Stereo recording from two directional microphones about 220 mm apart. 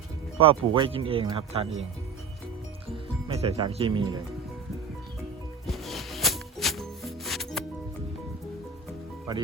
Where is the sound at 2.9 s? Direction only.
25° right (ahead or behind).